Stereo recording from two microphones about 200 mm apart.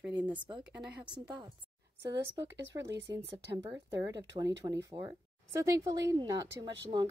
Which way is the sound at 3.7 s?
15° right (ahead or behind).